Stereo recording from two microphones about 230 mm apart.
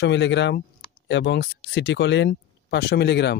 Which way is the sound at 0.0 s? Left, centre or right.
Left.